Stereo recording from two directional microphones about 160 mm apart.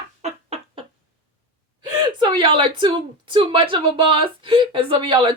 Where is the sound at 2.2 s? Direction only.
30° right (ahead or behind).